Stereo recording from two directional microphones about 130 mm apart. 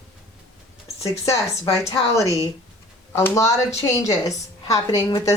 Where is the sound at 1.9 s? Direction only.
25° left (ahead or behind).